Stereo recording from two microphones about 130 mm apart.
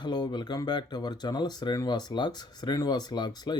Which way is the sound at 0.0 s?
35° left (ahead or behind).